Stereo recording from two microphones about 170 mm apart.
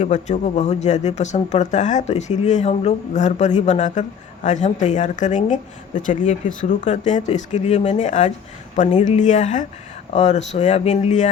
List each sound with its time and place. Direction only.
0.0 s speech: 40° left (ahead or behind)